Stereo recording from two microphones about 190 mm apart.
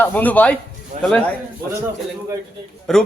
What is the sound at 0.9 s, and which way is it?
Speech, 40° right (ahead or behind).